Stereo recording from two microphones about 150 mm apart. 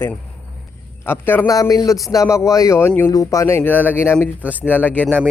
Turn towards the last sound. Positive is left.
turn(degrees=10)  # may be behind; listen again after turning